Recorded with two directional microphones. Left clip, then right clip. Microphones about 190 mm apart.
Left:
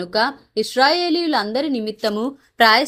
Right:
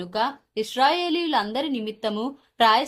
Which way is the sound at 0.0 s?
35° left (ahead or behind).